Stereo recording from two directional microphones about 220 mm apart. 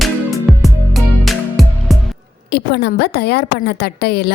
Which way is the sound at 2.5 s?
50° left (ahead or behind).